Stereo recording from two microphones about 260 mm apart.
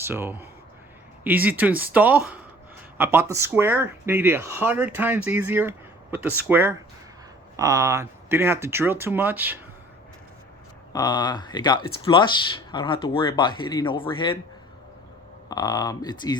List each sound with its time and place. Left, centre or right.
0.0 s speech: centre
10.9 s speech: centre
15.4 s speech: centre